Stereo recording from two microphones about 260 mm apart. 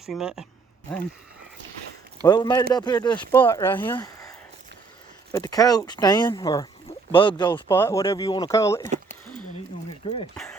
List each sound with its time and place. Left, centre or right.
0.0 s speech: centre
2.2 s speech: centre
5.3 s speech: centre
10.3 s speech: centre